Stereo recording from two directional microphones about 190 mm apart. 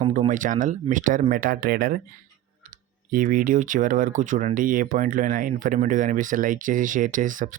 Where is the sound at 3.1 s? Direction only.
45° right (ahead or behind).